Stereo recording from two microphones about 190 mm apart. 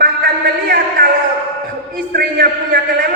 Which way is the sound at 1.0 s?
50° right (ahead or behind).